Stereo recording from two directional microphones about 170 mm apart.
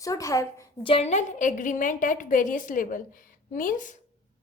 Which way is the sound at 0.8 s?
35° left (ahead or behind).